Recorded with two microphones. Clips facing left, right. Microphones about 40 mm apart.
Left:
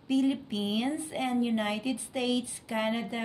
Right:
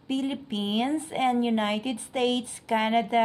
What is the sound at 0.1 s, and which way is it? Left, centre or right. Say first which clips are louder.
A woman's voice: left 1 dB; right.